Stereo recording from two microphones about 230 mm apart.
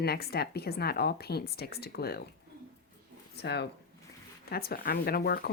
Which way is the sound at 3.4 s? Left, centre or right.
Left.